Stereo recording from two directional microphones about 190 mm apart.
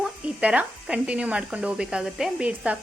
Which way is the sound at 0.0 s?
5° right (ahead or behind).